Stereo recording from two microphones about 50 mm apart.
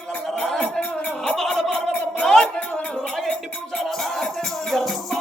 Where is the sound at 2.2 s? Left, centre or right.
Centre.